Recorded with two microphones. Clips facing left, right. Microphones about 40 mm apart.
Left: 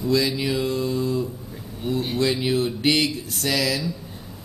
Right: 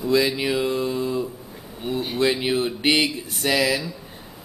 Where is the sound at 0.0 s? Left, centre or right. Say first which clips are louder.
Right 1 dB; centre.